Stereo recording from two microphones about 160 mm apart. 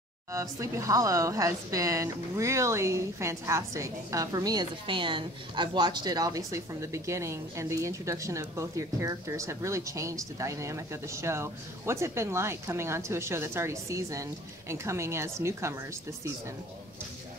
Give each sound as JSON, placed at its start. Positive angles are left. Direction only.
{"t": 0.3, "sound": "speech", "side_deg": -20}